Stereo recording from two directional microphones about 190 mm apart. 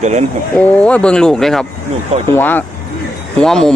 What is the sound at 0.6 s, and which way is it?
Speech, 5° left (ahead or behind).